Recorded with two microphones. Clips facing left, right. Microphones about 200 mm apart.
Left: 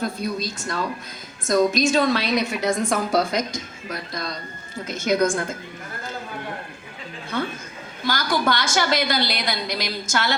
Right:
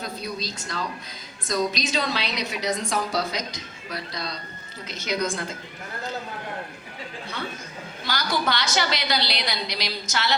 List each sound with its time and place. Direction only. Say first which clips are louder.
0.0 s a woman's voice: left 6 dB; 50° left (ahead or behind)
8.0 s a woman's voice: left 4 dB; 50° left (ahead or behind)